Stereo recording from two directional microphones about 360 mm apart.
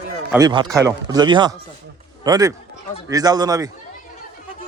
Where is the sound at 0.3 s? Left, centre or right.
Centre.